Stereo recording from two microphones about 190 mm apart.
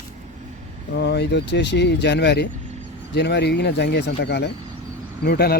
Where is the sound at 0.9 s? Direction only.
60° left (ahead or behind).